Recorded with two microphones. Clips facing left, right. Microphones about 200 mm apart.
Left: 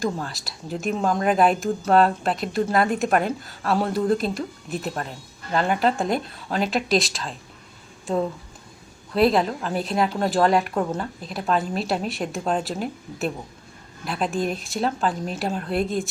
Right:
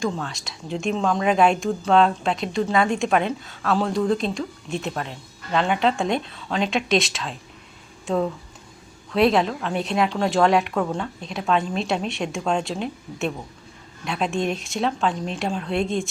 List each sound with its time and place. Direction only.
0.0 s a woman's voice: centre (ahead or behind)